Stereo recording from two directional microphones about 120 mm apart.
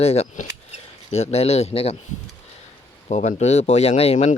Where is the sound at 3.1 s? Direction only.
80° left.